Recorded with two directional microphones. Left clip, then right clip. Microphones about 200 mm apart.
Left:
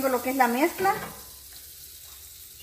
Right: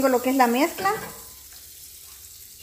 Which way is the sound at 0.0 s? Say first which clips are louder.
Right 4 dB; 55° right (ahead or behind).